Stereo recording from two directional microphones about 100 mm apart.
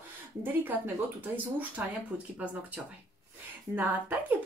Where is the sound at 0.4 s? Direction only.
20° right (ahead or behind).